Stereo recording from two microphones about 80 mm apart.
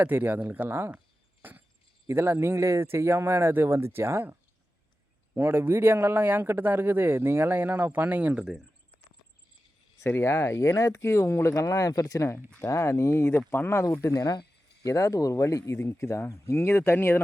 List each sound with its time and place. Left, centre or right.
0.0 s a man's voice: right
1.4 s a sound: right
2.0 s a man's voice: right; by 8.5 s centre
10.0 s speech: left
11.5 s speech: left
12.6 s speech: left
14.1 s speech: left
14.8 s speech: left